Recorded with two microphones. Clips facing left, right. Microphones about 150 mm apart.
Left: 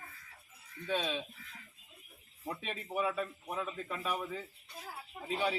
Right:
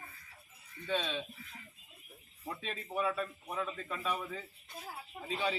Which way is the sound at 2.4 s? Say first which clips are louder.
Left 1 dB; 5° left (ahead or behind).